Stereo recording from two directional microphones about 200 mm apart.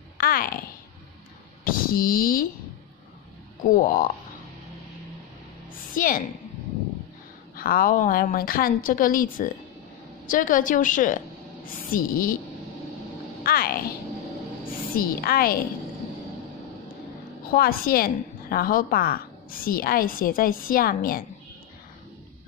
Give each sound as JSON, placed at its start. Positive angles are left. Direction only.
{"t": 0.2, "sound": "a child's voice", "side_deg": 45}
{"t": 1.6, "sound": "speech", "side_deg": 45}
{"t": 3.6, "sound": "a woman's voice", "side_deg": 40}
{"t": 5.9, "sound": "a woman's voice", "side_deg": 45}
{"t": 7.5, "sound": "a woman's voice", "side_deg": 45}
{"t": 13.4, "sound": "speech", "side_deg": 50}
{"t": 15.0, "sound": "a woman's voice", "side_deg": 50}
{"t": 17.5, "sound": "a woman's voice", "side_deg": 45}